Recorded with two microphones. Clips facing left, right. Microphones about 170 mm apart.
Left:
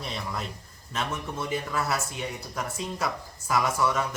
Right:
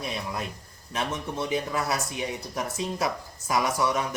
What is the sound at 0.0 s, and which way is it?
A man's voice, 10° right (ahead or behind).